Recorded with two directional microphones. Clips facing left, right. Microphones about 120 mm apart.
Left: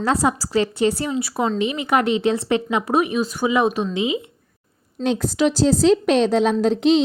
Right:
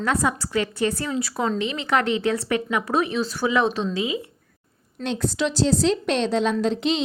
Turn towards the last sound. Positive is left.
turn(degrees=40)  # may be behind; listen again after turning